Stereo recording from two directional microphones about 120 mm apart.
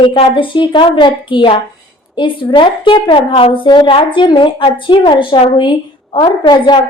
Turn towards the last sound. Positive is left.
turn(degrees=40)  # may be behind; listen again after turning